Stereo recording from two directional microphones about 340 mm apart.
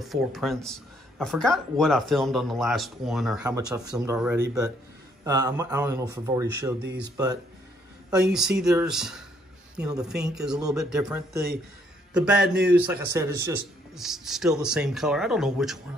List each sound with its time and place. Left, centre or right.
0.0 s speech: centre
6.8 s speech: right
8.1 s speech: centre